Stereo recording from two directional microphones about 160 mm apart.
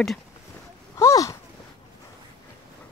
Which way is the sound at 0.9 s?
20° left (ahead or behind).